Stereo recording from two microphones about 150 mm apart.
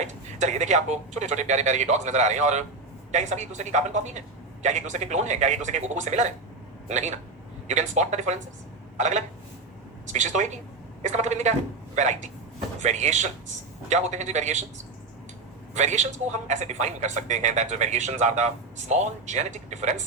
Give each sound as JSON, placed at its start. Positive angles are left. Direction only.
{"t": 0.0, "sound": "a man's voice", "side_deg": -50}
{"t": 15.7, "sound": "a man's voice", "side_deg": -50}